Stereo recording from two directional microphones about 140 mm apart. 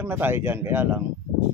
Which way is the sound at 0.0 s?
15° right (ahead or behind).